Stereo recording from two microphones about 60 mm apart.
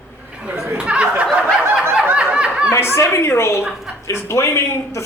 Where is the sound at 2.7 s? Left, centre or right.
Left.